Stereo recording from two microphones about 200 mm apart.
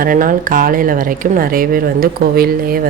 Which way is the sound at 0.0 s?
45° right (ahead or behind).